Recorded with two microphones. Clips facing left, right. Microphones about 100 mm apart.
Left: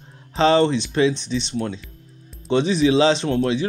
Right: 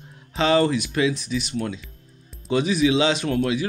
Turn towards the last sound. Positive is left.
turn(degrees=30)  # may be behind; listen again after turning